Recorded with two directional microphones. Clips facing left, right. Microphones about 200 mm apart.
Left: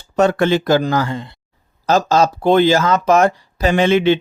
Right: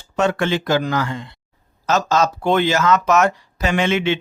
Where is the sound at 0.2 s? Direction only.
40° left (ahead or behind).